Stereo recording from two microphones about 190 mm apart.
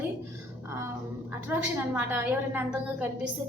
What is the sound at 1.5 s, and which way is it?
A woman's voice, 10° right (ahead or behind).